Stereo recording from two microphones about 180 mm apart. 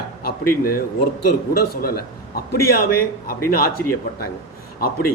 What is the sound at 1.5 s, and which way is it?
A man's voice, 60° left (ahead or behind).